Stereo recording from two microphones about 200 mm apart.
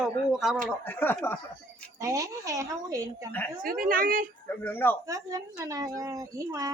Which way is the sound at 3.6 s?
45° right (ahead or behind).